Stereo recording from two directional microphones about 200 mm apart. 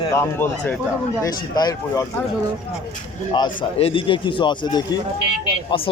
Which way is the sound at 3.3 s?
25° left (ahead or behind).